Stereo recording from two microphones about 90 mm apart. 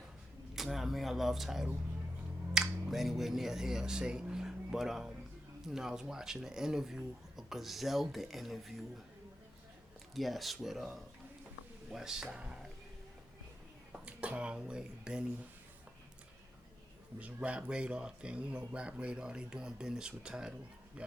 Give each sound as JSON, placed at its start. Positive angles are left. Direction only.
{"t": 0.5, "sound": "speech", "side_deg": 0}
{"t": 10.2, "sound": "speech", "side_deg": 0}
{"t": 14.0, "sound": "speech", "side_deg": -15}
{"t": 17.2, "sound": "speech", "side_deg": -15}